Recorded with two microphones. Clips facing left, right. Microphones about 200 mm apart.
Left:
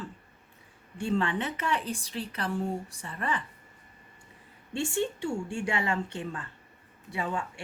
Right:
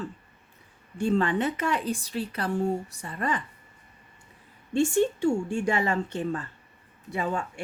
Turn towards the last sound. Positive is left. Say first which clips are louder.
# right 3 dB
turn(degrees=-40)  # may be behind; listen again after turning